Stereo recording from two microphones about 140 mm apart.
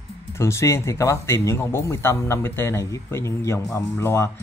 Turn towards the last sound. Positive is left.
turn(degrees=20)  # may be behind; listen again after turning